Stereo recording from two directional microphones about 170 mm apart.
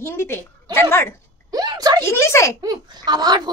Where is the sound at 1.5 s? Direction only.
25° right (ahead or behind).